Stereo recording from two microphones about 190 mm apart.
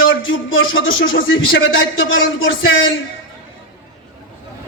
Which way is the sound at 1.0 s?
90° left.